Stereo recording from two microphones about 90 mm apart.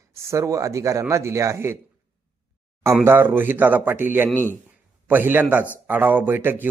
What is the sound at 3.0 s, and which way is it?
Speech, 25° right (ahead or behind).